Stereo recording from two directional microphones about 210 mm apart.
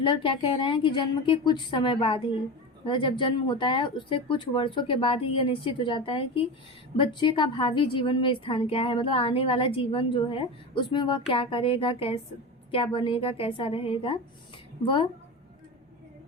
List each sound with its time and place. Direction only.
0.0 s a woman's voice: 25° left (ahead or behind)